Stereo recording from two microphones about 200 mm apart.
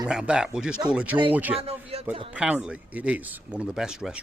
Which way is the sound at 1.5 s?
30° right (ahead or behind).